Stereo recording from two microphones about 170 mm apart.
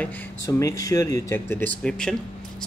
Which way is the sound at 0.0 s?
15° left (ahead or behind).